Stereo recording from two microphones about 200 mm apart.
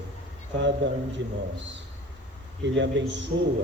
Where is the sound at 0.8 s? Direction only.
60° right (ahead or behind).